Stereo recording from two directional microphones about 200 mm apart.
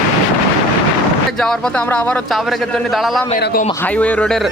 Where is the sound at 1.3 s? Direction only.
Centre (ahead or behind).